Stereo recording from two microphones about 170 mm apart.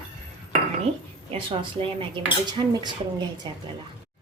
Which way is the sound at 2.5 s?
25° right (ahead or behind).